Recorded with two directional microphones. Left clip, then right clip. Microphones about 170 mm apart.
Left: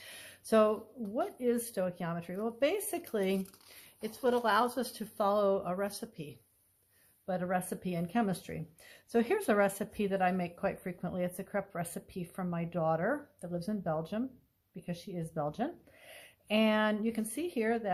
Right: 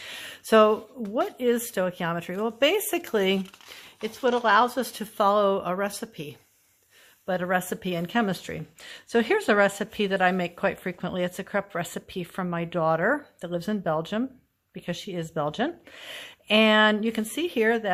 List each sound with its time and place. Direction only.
0.0 s speech: 30° right (ahead or behind)
4.0 s speech: 25° right (ahead or behind)